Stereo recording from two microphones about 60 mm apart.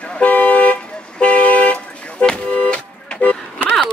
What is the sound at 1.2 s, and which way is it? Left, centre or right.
Vehicle, left.